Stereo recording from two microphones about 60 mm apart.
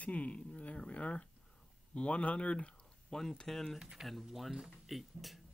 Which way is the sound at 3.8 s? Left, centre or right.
Centre.